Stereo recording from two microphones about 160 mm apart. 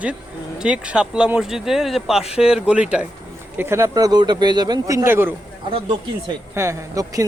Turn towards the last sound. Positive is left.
turn(degrees=-20)  # may be behind; listen again after turning